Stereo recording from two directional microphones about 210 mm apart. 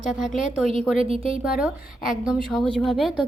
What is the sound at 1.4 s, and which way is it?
Speech, centre (ahead or behind).